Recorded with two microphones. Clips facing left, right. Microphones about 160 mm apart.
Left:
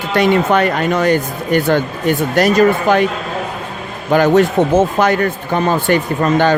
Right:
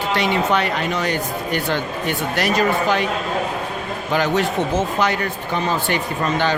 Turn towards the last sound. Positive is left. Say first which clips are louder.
# left 7 dB
turn(degrees=50)  # may be behind; listen again after turning